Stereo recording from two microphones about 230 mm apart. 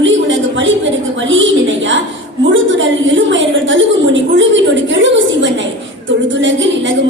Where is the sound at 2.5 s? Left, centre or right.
Right.